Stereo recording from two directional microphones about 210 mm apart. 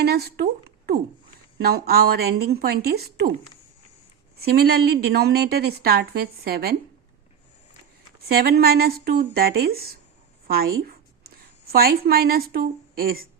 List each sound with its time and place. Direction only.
0.0 s a sound: 50° right (ahead or behind)
1.5 s a woman's voice: 50° right (ahead or behind)
4.4 s a woman's voice: 50° right (ahead or behind)
8.3 s a woman's voice: 45° right (ahead or behind)
10.5 s a sound: 45° right (ahead or behind)
11.7 s a woman's voice: 45° right (ahead or behind)